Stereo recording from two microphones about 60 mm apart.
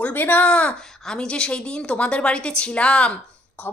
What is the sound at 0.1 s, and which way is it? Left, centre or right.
Speech, left.